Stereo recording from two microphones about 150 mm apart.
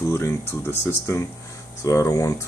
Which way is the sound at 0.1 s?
15° left (ahead or behind).